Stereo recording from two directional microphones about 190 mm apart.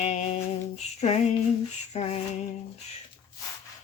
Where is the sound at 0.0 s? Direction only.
35° left (ahead or behind).